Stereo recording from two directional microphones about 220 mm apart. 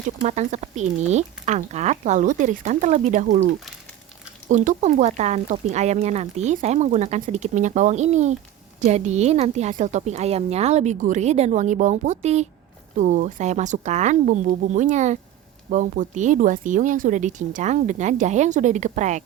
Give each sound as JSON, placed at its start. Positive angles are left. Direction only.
{"t": 0.3, "sound": "speech", "side_deg": -30}
{"t": 4.4, "sound": "speech", "side_deg": -35}